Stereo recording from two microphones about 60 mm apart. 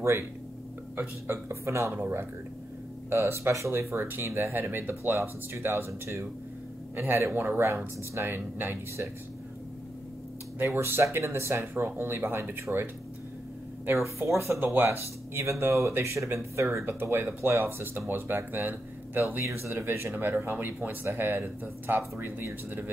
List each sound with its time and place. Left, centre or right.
0.9 s speech: right
3.9 s speech: right
4.6 s speech: right
8.3 s speech: right
10.6 s speech: right
12.7 s speech: centre
13.9 s speech: right
14.6 s speech: right
16.8 s speech: right
20.2 s speech: right